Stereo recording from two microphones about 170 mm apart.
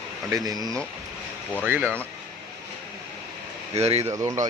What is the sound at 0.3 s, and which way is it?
Speech, 20° right (ahead or behind).